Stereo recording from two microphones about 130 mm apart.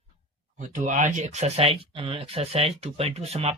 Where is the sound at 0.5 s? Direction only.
75° right (ahead or behind).